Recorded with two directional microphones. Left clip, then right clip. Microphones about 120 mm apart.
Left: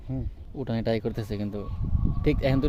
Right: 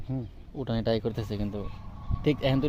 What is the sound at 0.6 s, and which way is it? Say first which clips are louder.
Speech: even; 35° left (ahead or behind).